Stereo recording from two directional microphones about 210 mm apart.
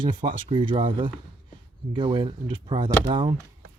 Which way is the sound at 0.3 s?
25° right (ahead or behind).